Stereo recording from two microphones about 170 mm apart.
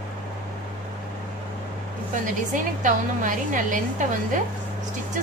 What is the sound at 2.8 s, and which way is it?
A woman's voice, 50° right (ahead or behind).